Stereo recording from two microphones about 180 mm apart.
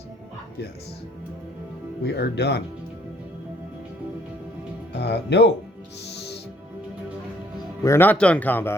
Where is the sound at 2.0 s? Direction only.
65° left (ahead or behind).